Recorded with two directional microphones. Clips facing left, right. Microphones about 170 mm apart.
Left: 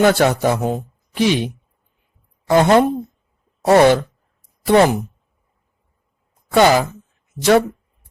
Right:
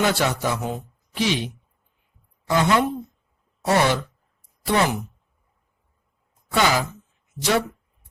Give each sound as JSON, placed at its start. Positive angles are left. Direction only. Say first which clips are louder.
{"t": 0.0, "sound": "speech", "louder": "left 8 dB", "side_deg": 50}
{"t": 2.5, "sound": "speech", "louder": "left 7 dB", "side_deg": 50}
{"t": 6.5, "sound": "speech", "louder": "left 8 dB", "side_deg": 55}